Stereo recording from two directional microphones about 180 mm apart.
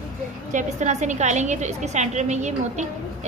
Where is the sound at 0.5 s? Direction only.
40° right (ahead or behind).